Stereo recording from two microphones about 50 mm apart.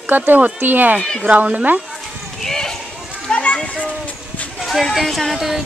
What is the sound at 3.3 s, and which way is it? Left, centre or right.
Children playing, left.